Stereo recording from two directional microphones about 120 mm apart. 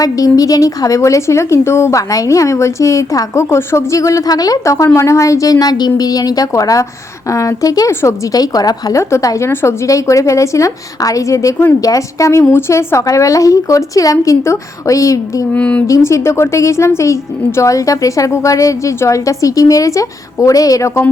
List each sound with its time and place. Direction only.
0.0 s a woman's voice: 30° left (ahead or behind)
15.5 s speech: 10° left (ahead or behind)
15.9 s a woman's voice: 25° left (ahead or behind)